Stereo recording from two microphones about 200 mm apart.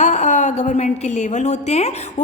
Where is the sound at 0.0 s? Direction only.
35° left (ahead or behind).